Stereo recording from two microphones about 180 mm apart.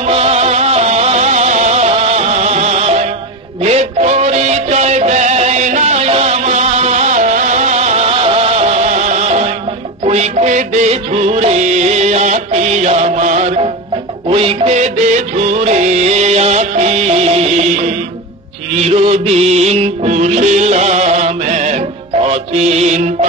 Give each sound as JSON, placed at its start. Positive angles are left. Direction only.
{"t": 0.0, "sound": "music", "side_deg": -35}